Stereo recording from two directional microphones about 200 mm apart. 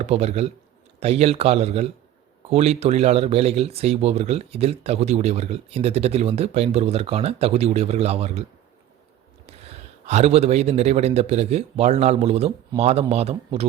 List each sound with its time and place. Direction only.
0.0 s speech: 30° right (ahead or behind)
10.1 s speech: 35° right (ahead or behind)